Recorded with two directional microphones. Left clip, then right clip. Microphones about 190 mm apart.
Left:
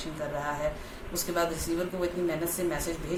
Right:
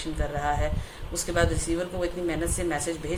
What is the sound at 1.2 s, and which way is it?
Speech, 15° right (ahead or behind).